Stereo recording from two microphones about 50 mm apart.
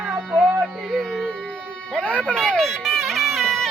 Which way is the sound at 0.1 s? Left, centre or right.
Right.